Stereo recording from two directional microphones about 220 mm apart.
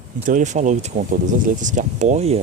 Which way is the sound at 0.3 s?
35° right (ahead or behind).